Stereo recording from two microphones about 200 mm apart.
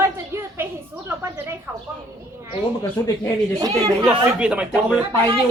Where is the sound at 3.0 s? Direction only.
15° left (ahead or behind).